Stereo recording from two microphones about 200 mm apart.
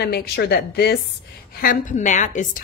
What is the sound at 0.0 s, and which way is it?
A woman's voice, 55° left (ahead or behind).